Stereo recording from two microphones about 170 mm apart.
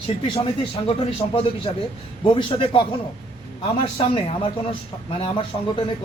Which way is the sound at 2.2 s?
30° left (ahead or behind).